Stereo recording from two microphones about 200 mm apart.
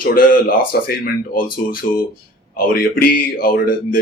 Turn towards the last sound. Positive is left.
turn(degrees=45)  # may be behind; listen again after turning